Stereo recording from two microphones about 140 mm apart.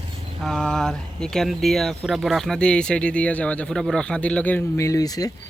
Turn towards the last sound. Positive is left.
turn(degrees=25)  # may be behind; listen again after turning